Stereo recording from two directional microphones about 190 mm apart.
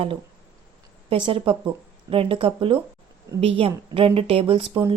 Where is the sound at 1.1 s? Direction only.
30° right (ahead or behind).